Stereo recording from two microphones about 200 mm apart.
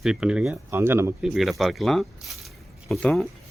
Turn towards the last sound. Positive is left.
turn(degrees=0)  # may be behind; listen again after turning